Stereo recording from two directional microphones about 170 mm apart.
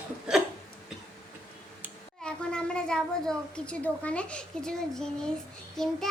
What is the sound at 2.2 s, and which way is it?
A child's voice, 5° left (ahead or behind).